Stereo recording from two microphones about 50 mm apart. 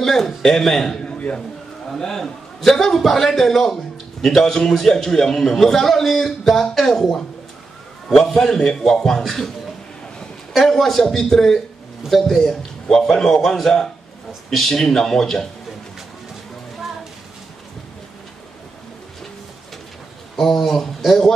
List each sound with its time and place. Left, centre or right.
0.0 s a sound: centre
0.3 s a man's voice: centre
1.1 s a sound: left
1.9 s a man's voice: centre
10.5 s a man's voice: centre
20.3 s a man's voice: centre